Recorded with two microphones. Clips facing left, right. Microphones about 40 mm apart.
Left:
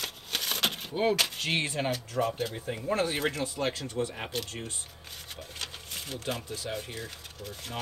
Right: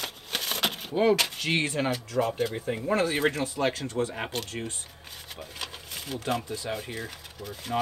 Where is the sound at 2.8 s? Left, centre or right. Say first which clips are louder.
Right 3 dB; right.